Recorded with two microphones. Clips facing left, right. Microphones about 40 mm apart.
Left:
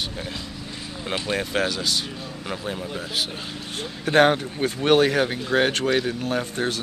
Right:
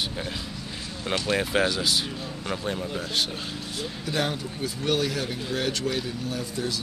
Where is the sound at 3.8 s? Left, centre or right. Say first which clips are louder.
Left 11 dB; left.